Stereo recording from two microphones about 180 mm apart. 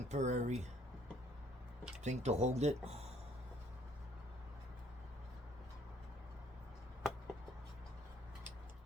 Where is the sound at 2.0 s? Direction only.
40° right (ahead or behind).